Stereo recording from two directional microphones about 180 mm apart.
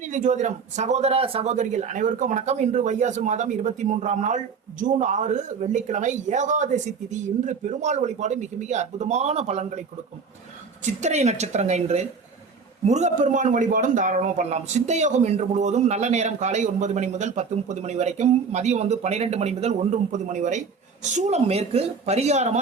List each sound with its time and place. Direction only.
0.0 s a man's voice: 45° right (ahead or behind)
10.8 s a man's voice: 40° right (ahead or behind)